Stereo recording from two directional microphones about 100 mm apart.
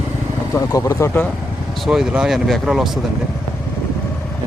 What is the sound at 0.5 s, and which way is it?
Speech, 35° left (ahead or behind).